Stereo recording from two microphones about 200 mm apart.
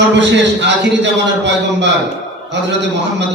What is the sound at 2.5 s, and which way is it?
Speech, 60° right (ahead or behind).